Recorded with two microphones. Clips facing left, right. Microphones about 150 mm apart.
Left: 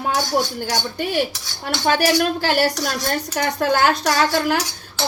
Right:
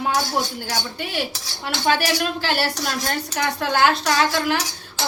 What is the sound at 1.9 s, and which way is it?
Speech, 45° left (ahead or behind).